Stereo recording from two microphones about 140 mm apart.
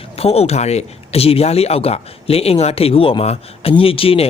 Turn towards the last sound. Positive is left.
turn(degrees=40)  # may be behind; listen again after turning